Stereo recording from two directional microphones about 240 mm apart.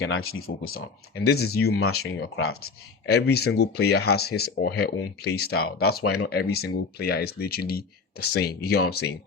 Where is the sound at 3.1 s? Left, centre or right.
Left.